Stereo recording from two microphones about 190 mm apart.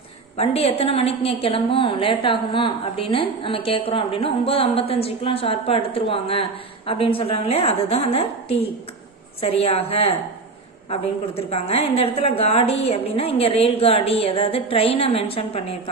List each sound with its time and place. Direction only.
0.3 s a woman's voice: 30° left (ahead or behind)